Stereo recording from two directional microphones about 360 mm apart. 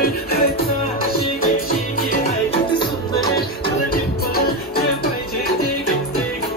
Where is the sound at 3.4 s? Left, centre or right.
Left.